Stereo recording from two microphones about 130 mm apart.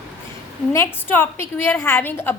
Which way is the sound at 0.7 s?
20° left (ahead or behind).